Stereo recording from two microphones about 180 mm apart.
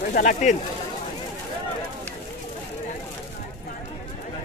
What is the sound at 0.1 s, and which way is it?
Speech, 45° left (ahead or behind).